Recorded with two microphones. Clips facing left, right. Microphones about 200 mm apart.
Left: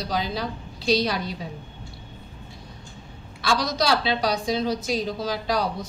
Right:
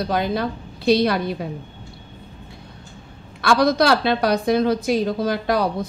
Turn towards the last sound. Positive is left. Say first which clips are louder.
# right 5 dB
turn(degrees=-55)  # may be behind; listen again after turning